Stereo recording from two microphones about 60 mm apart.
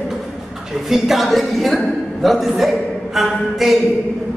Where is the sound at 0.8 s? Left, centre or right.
Centre.